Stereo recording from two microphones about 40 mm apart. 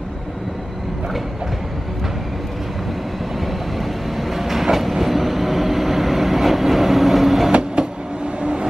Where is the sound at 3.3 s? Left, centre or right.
Centre.